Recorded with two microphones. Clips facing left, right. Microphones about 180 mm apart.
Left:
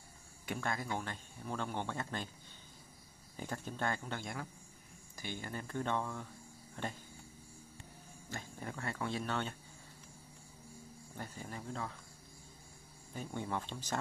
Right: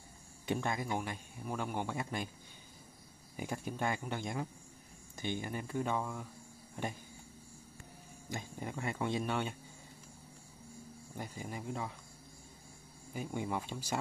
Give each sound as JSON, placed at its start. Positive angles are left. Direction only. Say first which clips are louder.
{"t": 0.5, "sound": "speech", "louder": "right 3 dB", "side_deg": -20}
{"t": 3.3, "sound": "speech", "louder": "right 2 dB", "side_deg": -10}
{"t": 6.7, "sound": "a sound", "louder": "right 2 dB", "side_deg": -15}
{"t": 8.3, "sound": "speech", "louder": "right 3 dB", "side_deg": -15}
{"t": 11.1, "sound": "speech", "louder": "right 3 dB", "side_deg": -15}
{"t": 13.1, "sound": "speech", "louder": "right 2 dB", "side_deg": -10}